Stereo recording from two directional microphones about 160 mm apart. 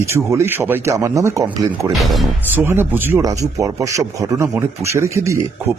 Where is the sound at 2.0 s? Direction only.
Centre (ahead or behind).